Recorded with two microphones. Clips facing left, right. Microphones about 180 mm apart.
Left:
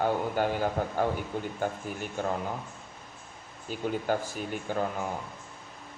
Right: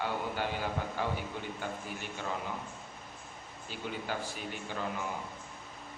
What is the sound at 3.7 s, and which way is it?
A man's voice, 45° left (ahead or behind).